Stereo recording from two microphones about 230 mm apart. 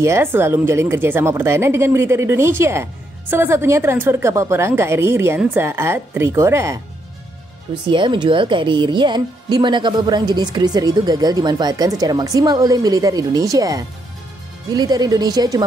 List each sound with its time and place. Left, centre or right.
0.0 s speech: centre
7.9 s speech: right